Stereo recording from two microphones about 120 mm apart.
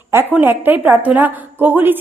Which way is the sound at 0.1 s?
15° right (ahead or behind).